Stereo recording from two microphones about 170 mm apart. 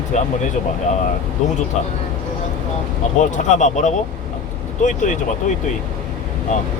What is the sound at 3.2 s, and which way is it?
Speech, 45° left (ahead or behind).